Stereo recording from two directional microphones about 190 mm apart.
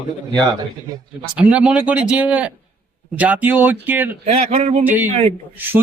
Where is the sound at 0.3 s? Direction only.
20° right (ahead or behind).